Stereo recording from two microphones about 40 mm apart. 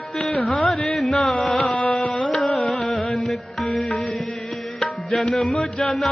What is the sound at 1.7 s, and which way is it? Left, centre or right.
Carnatic music, left.